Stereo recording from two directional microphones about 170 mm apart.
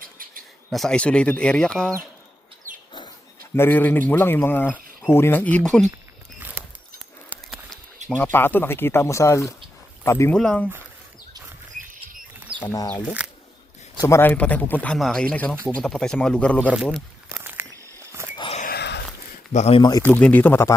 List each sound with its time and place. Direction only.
0.0 s cricket: 55° right (ahead or behind)
0.7 s speech: 5° left (ahead or behind)
3.5 s speech: 10° left (ahead or behind)
6.4 s mouse: 10° right (ahead or behind)
8.1 s speech: 10° left (ahead or behind)
12.6 s speech: 20° left (ahead or behind)
13.2 s a sound: 5° right (ahead or behind)
14.0 s speech: 15° left (ahead or behind)
16.7 s speech: 5° right (ahead or behind)
17.3 s a sound: 15° right (ahead or behind)
18.3 s a sound: 30° left (ahead or behind)
18.6 s a sound: 70° left (ahead or behind)
19.5 s speech: 40° left (ahead or behind)
20.0 s speech: 10° left (ahead or behind)